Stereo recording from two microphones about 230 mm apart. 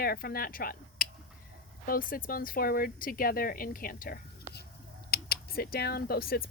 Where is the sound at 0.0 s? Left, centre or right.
Left.